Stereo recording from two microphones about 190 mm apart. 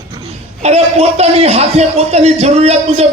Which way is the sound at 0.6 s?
35° right (ahead or behind).